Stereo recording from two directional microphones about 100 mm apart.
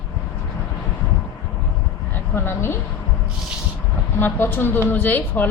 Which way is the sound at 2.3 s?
25° left (ahead or behind).